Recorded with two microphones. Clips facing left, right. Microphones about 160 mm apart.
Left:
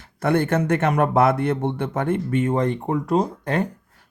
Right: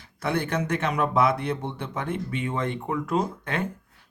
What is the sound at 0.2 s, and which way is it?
Speech, 50° left (ahead or behind).